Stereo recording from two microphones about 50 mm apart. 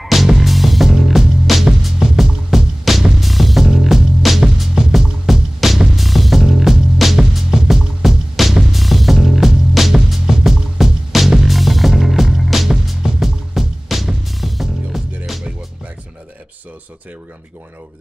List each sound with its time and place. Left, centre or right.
0.0 s music: centre